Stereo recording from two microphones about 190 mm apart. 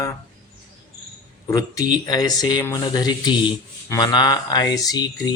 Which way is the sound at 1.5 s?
20° left (ahead or behind).